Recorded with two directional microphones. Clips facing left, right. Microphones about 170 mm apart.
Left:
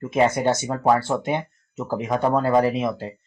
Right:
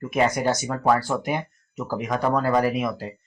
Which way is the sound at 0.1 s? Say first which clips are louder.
Left 2 dB; 25° left (ahead or behind).